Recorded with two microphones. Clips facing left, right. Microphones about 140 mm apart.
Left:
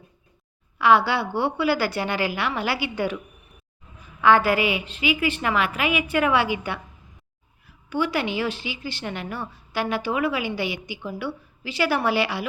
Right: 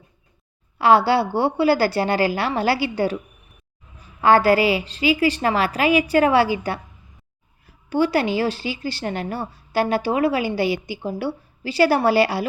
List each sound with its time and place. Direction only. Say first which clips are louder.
0.8 s speech: right 3 dB; 35° right (ahead or behind)
4.2 s speech: right 3 dB; 35° right (ahead or behind)
7.9 s speech: right 5 dB; 35° right (ahead or behind)